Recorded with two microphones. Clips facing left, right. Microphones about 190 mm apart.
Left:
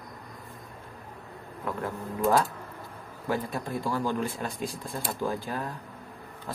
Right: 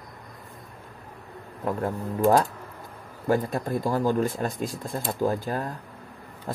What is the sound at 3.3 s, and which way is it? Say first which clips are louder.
Speech: right 6 dB; 45° right (ahead or behind).